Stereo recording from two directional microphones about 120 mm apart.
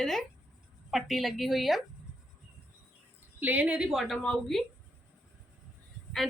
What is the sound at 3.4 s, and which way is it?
A woman's voice, 15° right (ahead or behind).